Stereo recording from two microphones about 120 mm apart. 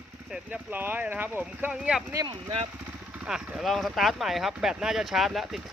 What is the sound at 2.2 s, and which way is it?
Speech, 50° right (ahead or behind).